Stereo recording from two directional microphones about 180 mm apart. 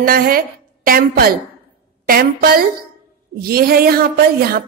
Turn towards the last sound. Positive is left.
turn(degrees=-55)  # may be behind; listen again after turning